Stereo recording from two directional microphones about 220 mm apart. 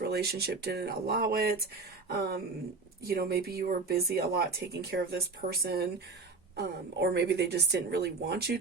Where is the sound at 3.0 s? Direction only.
45° right (ahead or behind).